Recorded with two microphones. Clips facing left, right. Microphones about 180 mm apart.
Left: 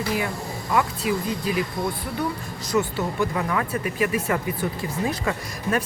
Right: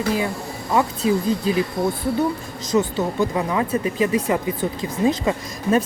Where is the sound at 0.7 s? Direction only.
25° right (ahead or behind).